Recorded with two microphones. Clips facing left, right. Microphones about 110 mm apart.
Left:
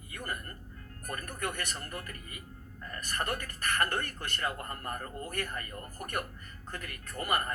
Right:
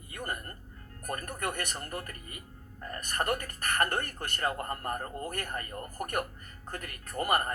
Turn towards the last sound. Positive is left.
turn(degrees=-40)  # may be behind; listen again after turning